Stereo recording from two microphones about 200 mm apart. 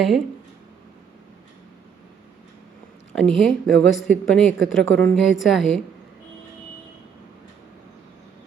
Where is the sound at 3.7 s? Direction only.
Centre (ahead or behind).